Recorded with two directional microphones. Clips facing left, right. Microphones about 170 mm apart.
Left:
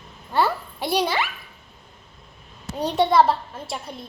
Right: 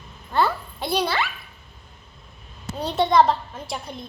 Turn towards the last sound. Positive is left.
turn(degrees=5)  # may be behind; listen again after turning